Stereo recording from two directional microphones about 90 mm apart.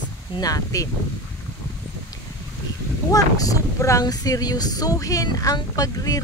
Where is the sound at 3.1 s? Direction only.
40° left (ahead or behind).